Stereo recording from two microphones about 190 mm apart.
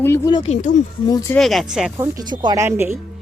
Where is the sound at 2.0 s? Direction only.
20° right (ahead or behind).